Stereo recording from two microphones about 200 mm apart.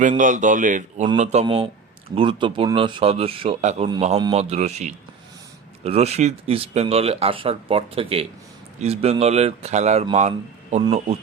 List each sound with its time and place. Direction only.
0.2 s speech: 40° right (ahead or behind)
1.0 s speech: 30° right (ahead or behind)